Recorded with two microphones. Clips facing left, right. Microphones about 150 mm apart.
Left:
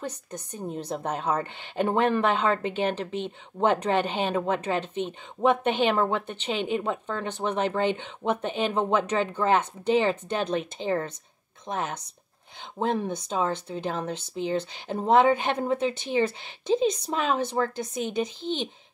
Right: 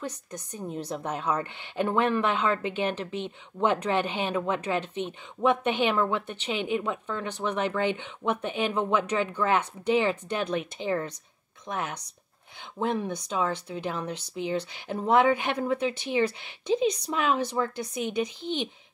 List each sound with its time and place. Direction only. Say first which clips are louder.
0.3 s speech: left 1 dB; 25° left (ahead or behind)